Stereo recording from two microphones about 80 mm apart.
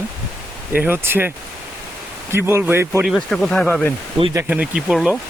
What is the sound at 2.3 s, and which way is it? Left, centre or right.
Speech, right.